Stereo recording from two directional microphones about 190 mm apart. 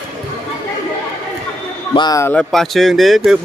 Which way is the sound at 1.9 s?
20° left (ahead or behind).